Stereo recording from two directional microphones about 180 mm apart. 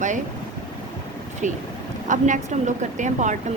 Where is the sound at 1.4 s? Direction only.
45° right (ahead or behind).